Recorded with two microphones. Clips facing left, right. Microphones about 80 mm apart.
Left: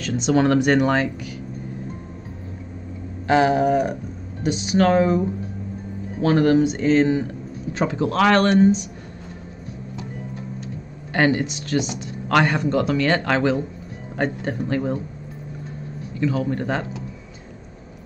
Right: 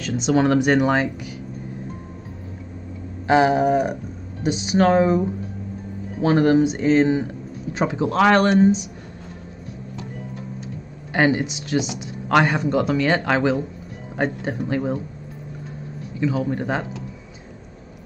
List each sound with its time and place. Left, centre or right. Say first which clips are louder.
0.0 s speech: even; centre
3.3 s speech: right 1 dB; centre
4.7 s speech: right 1 dB; right
6.2 s speech: even; centre
11.1 s speech: even; centre
16.2 s speech: even; centre